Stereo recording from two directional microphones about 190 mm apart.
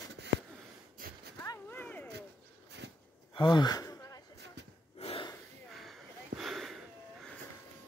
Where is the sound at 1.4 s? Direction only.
15° left (ahead or behind).